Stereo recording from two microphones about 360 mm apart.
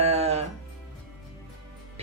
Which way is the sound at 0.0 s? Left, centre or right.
Centre.